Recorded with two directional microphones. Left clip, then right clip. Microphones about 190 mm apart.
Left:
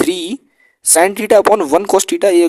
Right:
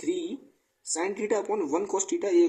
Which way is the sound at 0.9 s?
65° left (ahead or behind).